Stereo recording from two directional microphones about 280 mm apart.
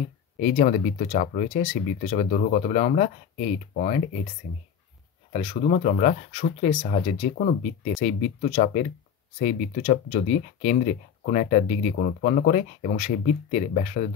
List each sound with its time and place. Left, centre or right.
0.4 s speech: left
5.3 s speech: left